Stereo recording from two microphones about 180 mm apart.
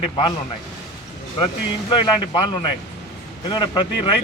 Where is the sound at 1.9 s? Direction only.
25° left (ahead or behind).